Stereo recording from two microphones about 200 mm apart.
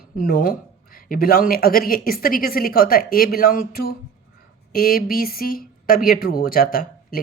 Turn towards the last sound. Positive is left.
turn(degrees=45)  # may be behind; listen again after turning